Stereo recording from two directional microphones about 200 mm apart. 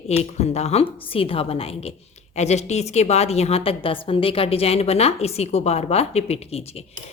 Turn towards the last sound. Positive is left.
turn(degrees=30)  # may be behind; listen again after turning